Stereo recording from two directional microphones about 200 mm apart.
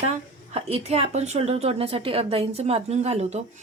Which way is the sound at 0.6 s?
30° right (ahead or behind).